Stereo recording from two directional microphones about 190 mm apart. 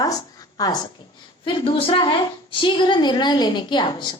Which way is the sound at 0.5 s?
20° left (ahead or behind).